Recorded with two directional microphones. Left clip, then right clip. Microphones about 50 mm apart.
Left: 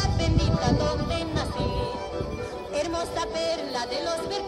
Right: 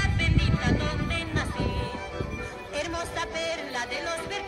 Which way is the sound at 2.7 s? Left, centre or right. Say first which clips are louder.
Left 3 dB; left.